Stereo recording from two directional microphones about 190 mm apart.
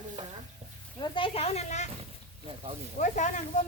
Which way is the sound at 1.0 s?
30° left (ahead or behind).